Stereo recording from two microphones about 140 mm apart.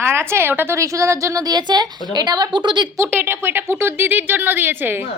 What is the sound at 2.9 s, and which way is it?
A woman's voice, 15° right (ahead or behind).